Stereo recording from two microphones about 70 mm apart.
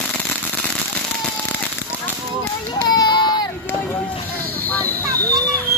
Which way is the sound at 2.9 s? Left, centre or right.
Left.